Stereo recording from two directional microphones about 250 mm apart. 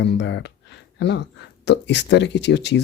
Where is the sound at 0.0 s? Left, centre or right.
Left.